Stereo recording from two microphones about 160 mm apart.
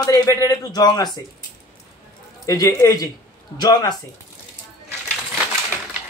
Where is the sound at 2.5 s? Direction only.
20° left (ahead or behind).